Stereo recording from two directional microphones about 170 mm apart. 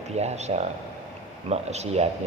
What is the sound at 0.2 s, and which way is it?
A man's voice, 40° right (ahead or behind).